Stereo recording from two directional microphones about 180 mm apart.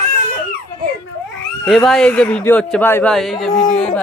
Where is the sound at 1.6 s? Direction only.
Centre (ahead or behind).